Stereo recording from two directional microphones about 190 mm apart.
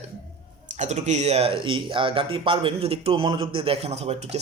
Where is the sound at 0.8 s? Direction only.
35° right (ahead or behind).